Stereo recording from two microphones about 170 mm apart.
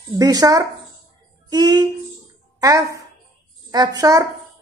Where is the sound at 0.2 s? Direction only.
20° right (ahead or behind).